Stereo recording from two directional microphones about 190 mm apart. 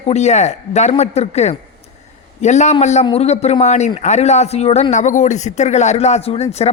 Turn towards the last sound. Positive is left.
turn(degrees=35)  # may be behind; listen again after turning